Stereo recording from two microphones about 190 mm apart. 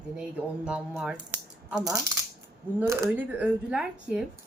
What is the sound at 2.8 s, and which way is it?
Speech, 15° right (ahead or behind).